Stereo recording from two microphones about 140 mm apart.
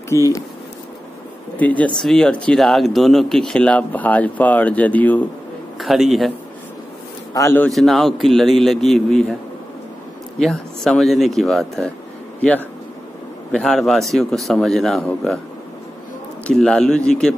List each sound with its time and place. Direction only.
0.1 s a man's voice: 20° left (ahead or behind)
1.6 s speech: 10° left (ahead or behind)
5.8 s speech: centre (ahead or behind)
7.3 s a man's voice: 20° left (ahead or behind)
7.6 s speech: centre (ahead or behind)
10.4 s speech: centre (ahead or behind)
16.4 s speech: 5° left (ahead or behind)